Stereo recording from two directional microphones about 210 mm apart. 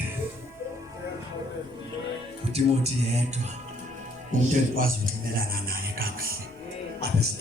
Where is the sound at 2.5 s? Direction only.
30° right (ahead or behind).